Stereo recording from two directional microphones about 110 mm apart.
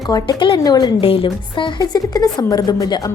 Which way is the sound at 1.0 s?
55° left (ahead or behind).